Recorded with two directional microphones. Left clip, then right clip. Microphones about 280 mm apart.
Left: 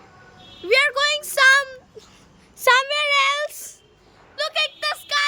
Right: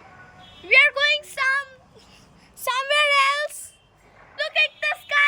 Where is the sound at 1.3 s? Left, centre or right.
Left.